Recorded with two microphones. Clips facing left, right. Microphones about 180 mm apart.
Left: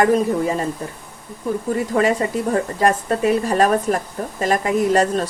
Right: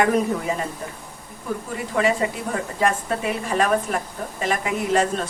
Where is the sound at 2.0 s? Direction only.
40° left (ahead or behind).